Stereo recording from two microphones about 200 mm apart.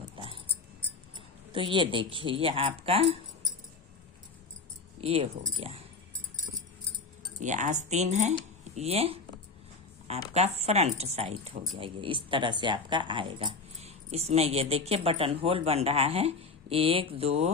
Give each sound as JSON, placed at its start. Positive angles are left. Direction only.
{"t": 1.5, "sound": "speech", "side_deg": -25}
{"t": 4.9, "sound": "speech", "side_deg": -30}
{"t": 7.3, "sound": "speech", "side_deg": -35}